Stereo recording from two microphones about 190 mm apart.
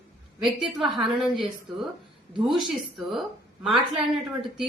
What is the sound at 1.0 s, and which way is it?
A woman's voice, centre (ahead or behind).